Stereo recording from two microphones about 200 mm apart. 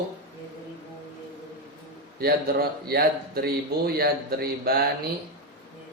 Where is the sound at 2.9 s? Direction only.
50° right (ahead or behind).